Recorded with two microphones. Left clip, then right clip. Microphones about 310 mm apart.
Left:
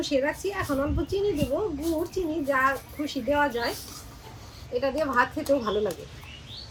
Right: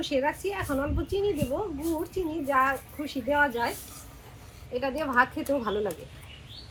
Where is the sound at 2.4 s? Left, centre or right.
Centre.